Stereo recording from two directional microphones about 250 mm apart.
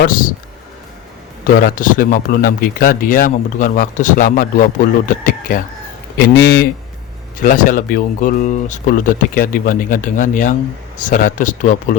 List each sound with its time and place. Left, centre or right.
0.0 s a man's voice: left
1.6 s a man's voice: left